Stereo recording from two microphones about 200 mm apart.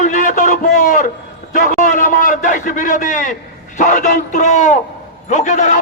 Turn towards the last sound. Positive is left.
turn(degrees=35)  # may be behind; listen again after turning